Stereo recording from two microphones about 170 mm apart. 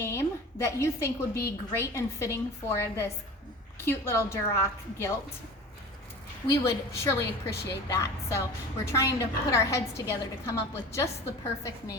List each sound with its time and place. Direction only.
0.0 s a sound: 15° left (ahead or behind)
1.5 s a woman's voice: 15° left (ahead or behind)
6.5 s a woman's voice: 15° left (ahead or behind)